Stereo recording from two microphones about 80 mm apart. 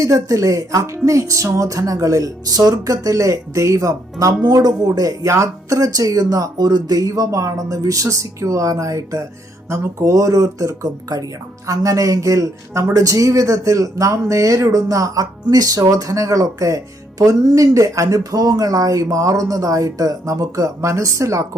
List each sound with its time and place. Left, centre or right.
0.0 s speech: right